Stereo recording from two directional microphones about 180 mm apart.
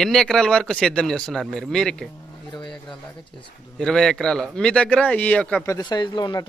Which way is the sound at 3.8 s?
5° left (ahead or behind).